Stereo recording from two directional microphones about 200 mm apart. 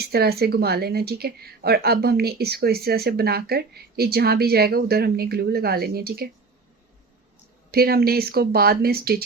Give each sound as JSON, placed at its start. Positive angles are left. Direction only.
{"t": 0.0, "sound": "a woman's voice", "side_deg": -50}
{"t": 7.7, "sound": "a woman's voice", "side_deg": -50}